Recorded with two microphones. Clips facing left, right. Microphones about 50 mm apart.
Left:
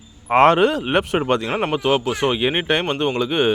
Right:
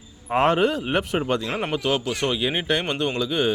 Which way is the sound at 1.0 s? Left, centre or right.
Left.